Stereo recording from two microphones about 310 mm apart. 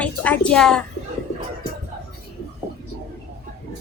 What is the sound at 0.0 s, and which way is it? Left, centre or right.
Speech, centre.